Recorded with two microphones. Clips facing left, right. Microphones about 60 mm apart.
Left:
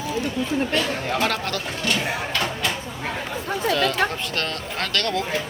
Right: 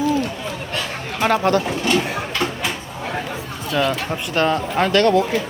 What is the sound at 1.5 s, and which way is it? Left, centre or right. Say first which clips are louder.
Speech: right 8 dB; right.